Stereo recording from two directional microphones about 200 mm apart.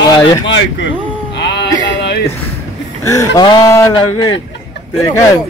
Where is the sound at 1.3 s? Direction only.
60° left (ahead or behind).